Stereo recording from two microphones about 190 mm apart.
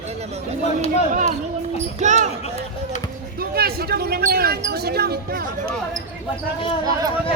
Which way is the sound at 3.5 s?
55° right (ahead or behind).